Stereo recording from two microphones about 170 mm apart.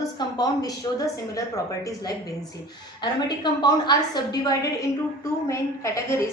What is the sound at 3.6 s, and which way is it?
A woman's voice, 25° left (ahead or behind).